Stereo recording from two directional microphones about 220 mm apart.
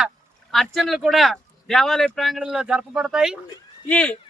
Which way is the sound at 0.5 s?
Centre (ahead or behind).